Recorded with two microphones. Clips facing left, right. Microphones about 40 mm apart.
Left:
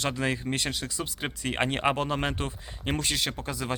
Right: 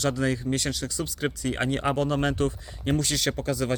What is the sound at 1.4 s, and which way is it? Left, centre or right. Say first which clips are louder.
Speech: left 1 dB; left.